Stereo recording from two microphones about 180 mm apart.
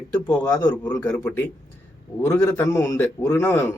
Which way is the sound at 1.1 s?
5° left (ahead or behind).